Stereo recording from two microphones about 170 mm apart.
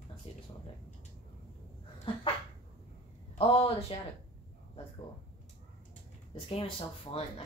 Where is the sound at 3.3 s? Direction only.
35° left (ahead or behind).